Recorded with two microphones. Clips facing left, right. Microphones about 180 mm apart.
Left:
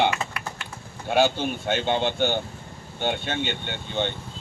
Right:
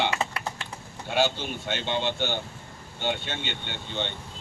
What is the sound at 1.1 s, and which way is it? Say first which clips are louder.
Speech: left 4 dB; 50° left (ahead or behind).